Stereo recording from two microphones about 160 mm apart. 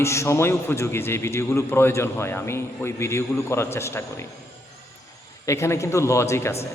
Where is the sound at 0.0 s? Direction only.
15° left (ahead or behind).